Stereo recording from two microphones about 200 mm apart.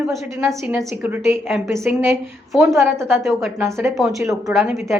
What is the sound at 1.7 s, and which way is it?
Speech, 15° right (ahead or behind).